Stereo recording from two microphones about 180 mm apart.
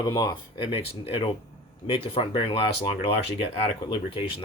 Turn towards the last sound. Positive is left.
turn(degrees=25)  # may be behind; listen again after turning